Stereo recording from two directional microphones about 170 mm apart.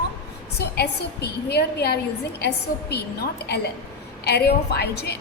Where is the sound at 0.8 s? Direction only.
70° left (ahead or behind).